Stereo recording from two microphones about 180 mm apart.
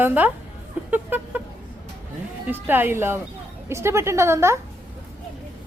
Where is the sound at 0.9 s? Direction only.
10° right (ahead or behind).